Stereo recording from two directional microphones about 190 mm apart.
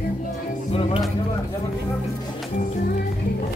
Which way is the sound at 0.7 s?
30° left (ahead or behind).